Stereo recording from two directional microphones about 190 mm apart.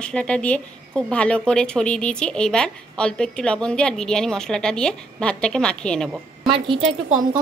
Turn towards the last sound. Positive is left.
turn(degrees=-25)  # may be behind; listen again after turning